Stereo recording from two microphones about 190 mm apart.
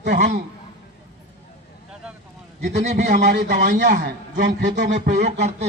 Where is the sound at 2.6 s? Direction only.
35° right (ahead or behind).